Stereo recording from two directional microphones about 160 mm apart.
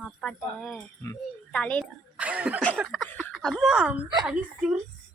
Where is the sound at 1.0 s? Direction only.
15° left (ahead or behind).